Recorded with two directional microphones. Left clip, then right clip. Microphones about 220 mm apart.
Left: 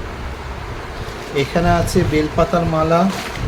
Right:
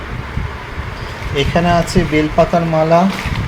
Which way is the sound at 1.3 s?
Centre (ahead or behind).